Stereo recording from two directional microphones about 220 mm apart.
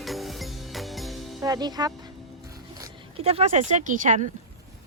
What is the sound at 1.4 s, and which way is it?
Speech, 15° right (ahead or behind).